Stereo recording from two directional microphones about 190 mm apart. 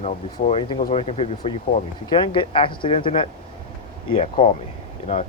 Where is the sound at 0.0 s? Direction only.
35° left (ahead or behind).